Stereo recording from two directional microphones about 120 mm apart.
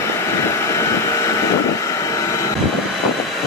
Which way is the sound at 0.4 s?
25° left (ahead or behind).